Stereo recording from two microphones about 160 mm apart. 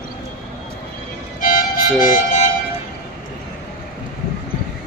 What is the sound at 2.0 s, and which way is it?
Harmonica, 55° left (ahead or behind).